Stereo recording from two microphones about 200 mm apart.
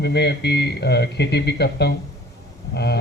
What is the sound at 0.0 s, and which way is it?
Speech, 55° left (ahead or behind).